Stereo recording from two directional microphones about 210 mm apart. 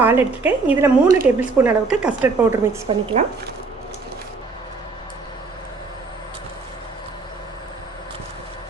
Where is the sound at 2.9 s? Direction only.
25° right (ahead or behind).